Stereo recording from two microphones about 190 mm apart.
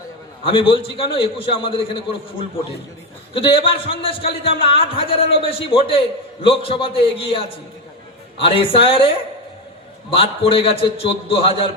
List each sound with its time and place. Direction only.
0.4 s a man's voice: 25° left (ahead or behind)
3.3 s a man's voice: 30° left (ahead or behind)
8.4 s a man's voice: 30° left (ahead or behind)